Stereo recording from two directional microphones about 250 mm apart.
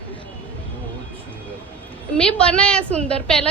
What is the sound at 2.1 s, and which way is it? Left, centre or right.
A woman's voice, centre.